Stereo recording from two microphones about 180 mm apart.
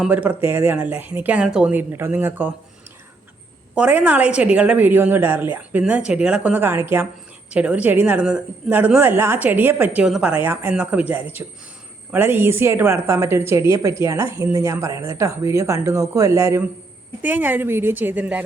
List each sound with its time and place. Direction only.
0.0 s a woman's voice: 10° right (ahead or behind)
3.8 s a woman's voice: 10° right (ahead or behind)